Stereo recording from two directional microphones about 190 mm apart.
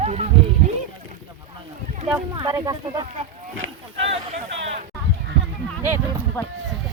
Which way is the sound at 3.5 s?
90° right.